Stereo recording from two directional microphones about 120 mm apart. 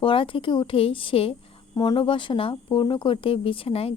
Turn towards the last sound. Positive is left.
turn(degrees=55)  # may be behind; listen again after turning